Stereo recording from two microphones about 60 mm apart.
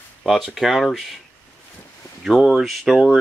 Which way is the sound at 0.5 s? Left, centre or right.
Centre.